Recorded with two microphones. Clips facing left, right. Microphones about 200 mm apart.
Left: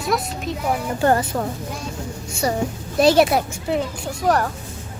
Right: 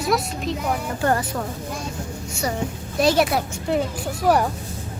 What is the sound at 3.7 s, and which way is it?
Speech, centre (ahead or behind).